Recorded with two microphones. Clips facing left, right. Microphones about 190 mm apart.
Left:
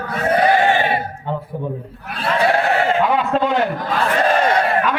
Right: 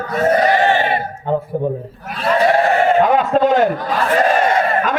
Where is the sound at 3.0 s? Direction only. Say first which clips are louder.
Right 4 dB; 45° right (ahead or behind).